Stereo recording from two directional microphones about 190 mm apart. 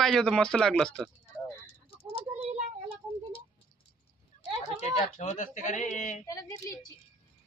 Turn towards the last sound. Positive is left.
turn(degrees=15)  # may be behind; listen again after turning